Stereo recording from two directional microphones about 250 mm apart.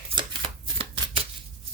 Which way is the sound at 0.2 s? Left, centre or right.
Centre.